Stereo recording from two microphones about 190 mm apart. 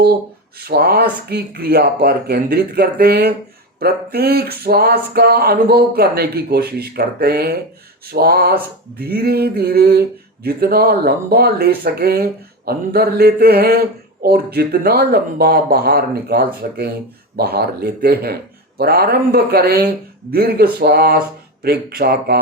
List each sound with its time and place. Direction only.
0.6 s speech: 55° right (ahead or behind)